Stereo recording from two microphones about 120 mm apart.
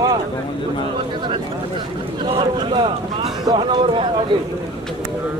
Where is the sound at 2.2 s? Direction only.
45° right (ahead or behind).